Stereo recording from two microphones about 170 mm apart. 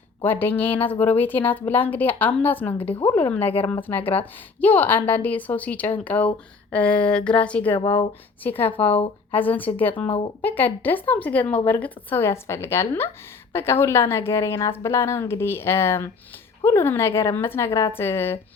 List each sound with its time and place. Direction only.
0.2 s a woman's voice: 10° left (ahead or behind)
2.7 s speech: 35° left (ahead or behind)
3.0 s a woman's voice: 15° left (ahead or behind)
4.0 s speech: 35° left (ahead or behind)
4.6 s a woman's voice: 10° left (ahead or behind)
7.8 s speech: 30° left (ahead or behind)
8.4 s a woman's voice: 10° left (ahead or behind)